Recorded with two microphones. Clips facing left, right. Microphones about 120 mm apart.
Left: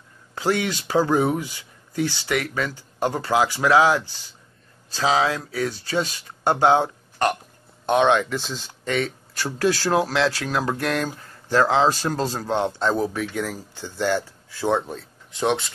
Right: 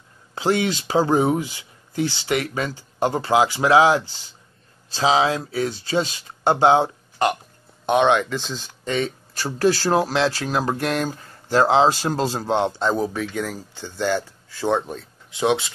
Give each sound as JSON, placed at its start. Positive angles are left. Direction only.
{"t": 0.3, "sound": "speech", "side_deg": -25}
{"t": 7.9, "sound": "speech", "side_deg": 0}
{"t": 8.8, "sound": "speech", "side_deg": -25}
{"t": 9.5, "sound": "speech", "side_deg": -10}
{"t": 10.1, "sound": "speech", "side_deg": -25}
{"t": 12.7, "sound": "speech", "side_deg": 0}